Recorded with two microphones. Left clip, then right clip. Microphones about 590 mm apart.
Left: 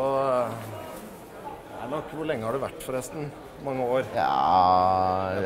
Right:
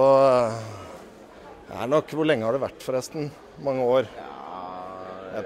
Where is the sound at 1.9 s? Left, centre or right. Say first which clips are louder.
Right 9 dB; right.